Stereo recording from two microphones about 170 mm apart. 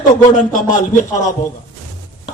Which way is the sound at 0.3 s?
50° left (ahead or behind).